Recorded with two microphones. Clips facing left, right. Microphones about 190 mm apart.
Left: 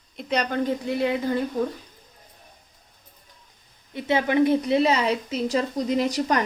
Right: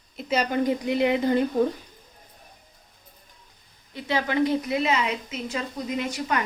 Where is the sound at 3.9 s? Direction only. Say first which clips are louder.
Left 4 dB; 20° left (ahead or behind).